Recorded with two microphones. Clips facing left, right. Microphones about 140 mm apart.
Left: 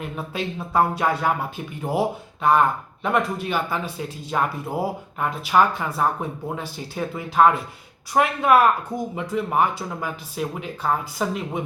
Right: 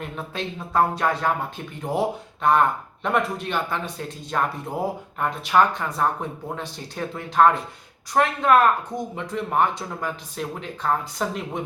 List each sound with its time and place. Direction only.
0.0 s speech: 5° left (ahead or behind)